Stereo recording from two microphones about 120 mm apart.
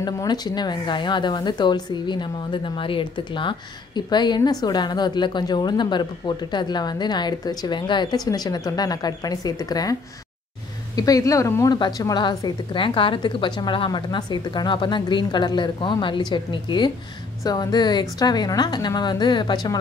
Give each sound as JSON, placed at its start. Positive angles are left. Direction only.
{"t": 0.0, "sound": "a woman's voice", "side_deg": 35}
{"t": 11.0, "sound": "speech", "side_deg": 30}
{"t": 11.7, "sound": "a woman's voice", "side_deg": 35}